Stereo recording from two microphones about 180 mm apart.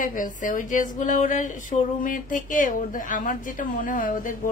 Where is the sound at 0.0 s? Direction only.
45° left (ahead or behind).